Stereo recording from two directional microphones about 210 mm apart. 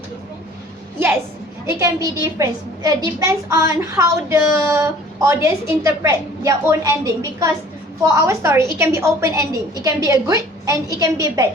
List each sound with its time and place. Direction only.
0.9 s a woman's voice: 10° right (ahead or behind)